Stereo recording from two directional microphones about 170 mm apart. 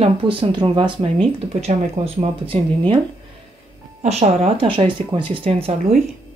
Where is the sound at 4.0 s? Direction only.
40° right (ahead or behind).